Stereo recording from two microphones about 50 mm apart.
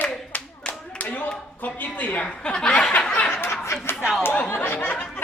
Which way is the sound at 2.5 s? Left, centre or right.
Centre.